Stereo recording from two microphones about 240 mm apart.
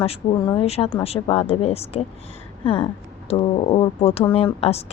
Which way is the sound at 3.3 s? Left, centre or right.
Left.